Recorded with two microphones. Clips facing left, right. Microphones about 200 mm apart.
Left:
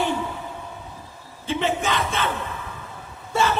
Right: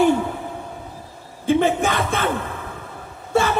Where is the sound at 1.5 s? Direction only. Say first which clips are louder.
Right 6 dB; 50° right (ahead or behind).